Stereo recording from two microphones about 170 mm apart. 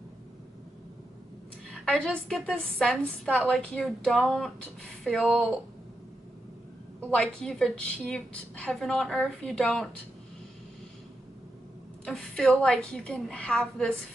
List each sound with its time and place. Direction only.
1.7 s a woman's voice: 5° left (ahead or behind)
7.0 s a woman's voice: 5° left (ahead or behind)
12.0 s a woman's voice: 5° left (ahead or behind)